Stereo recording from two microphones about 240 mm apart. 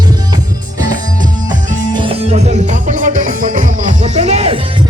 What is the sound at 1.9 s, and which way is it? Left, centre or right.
Music, right.